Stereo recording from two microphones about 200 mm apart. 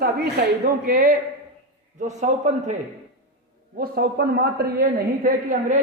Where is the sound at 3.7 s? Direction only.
50° right (ahead or behind).